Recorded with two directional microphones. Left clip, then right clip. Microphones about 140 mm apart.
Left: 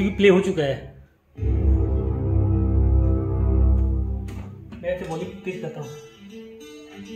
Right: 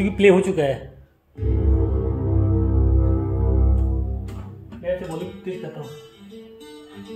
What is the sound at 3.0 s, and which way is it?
Music, 5° right (ahead or behind).